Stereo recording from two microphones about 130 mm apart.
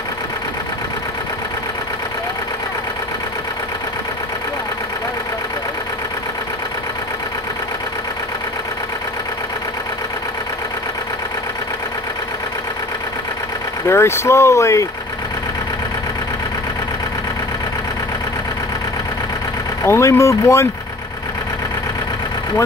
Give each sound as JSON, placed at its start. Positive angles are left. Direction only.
{"t": 13.8, "sound": "speech", "side_deg": 20}
{"t": 19.8, "sound": "speech", "side_deg": 20}